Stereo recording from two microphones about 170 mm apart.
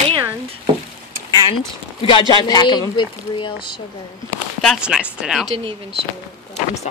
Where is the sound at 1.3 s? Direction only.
25° left (ahead or behind).